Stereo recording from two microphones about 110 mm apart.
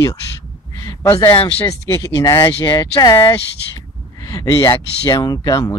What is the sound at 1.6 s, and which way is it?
Speech, 30° left (ahead or behind).